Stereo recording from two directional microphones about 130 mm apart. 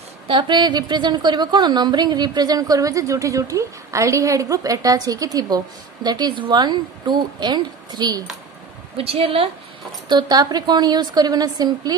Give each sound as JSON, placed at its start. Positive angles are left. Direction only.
{"t": 0.3, "sound": "a woman's voice", "side_deg": -35}
{"t": 8.9, "sound": "a woman's voice", "side_deg": -50}
{"t": 10.0, "sound": "speech", "side_deg": -30}